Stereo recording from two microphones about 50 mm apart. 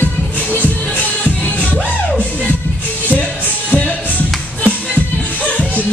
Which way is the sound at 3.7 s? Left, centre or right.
Left.